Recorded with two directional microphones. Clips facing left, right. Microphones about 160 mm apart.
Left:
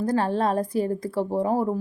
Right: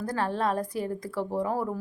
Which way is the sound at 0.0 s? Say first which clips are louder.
Left 5 dB; 30° left (ahead or behind).